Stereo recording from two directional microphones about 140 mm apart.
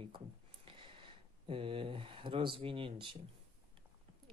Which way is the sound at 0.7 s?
40° right (ahead or behind).